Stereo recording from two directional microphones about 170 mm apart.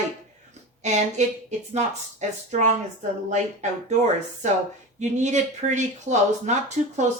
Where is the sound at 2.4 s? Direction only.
45° right (ahead or behind).